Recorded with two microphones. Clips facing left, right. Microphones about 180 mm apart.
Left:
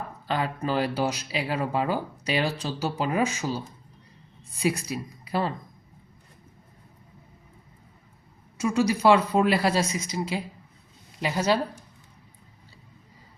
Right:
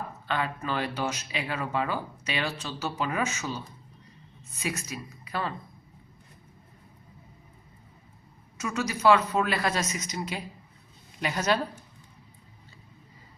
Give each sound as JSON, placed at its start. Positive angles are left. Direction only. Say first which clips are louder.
{"t": 0.3, "sound": "speech", "louder": "left 3 dB", "side_deg": 35}
{"t": 8.5, "sound": "speech", "louder": "left 8 dB", "side_deg": 30}